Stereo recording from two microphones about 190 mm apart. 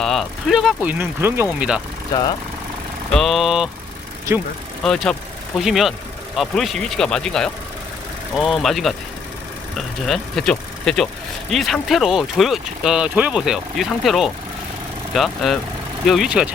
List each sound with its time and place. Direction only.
0.0 s speech: centre (ahead or behind)
3.1 s speech: centre (ahead or behind)
4.8 s speech: centre (ahead or behind)